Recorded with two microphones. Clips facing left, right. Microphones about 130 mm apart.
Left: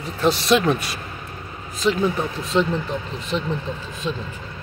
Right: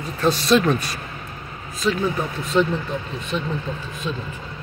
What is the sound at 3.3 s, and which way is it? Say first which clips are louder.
Speech: left 1 dB; 25° left (ahead or behind).